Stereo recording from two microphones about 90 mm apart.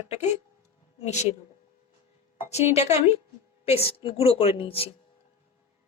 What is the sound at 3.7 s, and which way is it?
Speech, 90° left.